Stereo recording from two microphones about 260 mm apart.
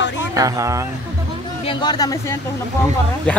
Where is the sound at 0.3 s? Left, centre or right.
Centre.